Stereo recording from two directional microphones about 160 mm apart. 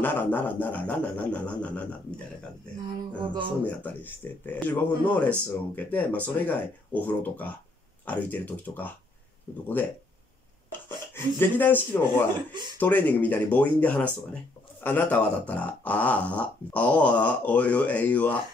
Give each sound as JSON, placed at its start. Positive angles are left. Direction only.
{"t": 0.0, "sound": "speech", "side_deg": 10}
{"t": 3.2, "sound": "speech", "side_deg": -30}
{"t": 3.6, "sound": "speech", "side_deg": 10}
{"t": 11.1, "sound": "speech", "side_deg": 10}